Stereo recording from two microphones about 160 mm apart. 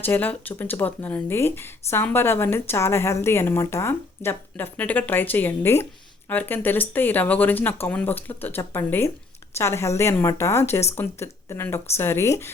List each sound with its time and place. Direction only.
0.0 s speech: 10° left (ahead or behind)